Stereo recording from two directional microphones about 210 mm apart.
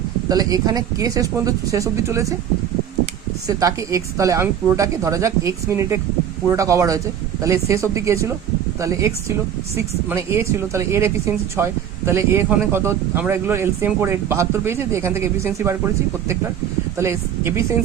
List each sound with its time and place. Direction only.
0.3 s a woman's voice: 15° right (ahead or behind)
3.4 s a woman's voice: 15° right (ahead or behind)
17.0 s a woman's voice: 10° right (ahead or behind)